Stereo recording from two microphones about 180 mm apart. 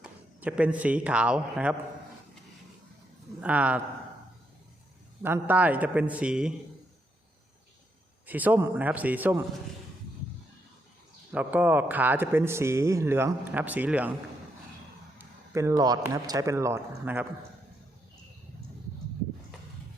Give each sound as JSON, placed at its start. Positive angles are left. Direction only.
{"t": 0.0, "sound": "speech", "side_deg": -5}
{"t": 3.4, "sound": "speech", "side_deg": -10}
{"t": 5.2, "sound": "speech", "side_deg": -10}
{"t": 8.3, "sound": "speech", "side_deg": -10}
{"t": 11.3, "sound": "speech", "side_deg": -10}
{"t": 15.2, "sound": "speech", "side_deg": -15}